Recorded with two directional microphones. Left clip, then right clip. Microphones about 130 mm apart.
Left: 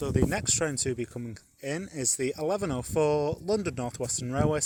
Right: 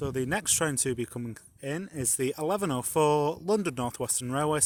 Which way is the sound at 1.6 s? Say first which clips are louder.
Left 2 dB; 25° right (ahead or behind).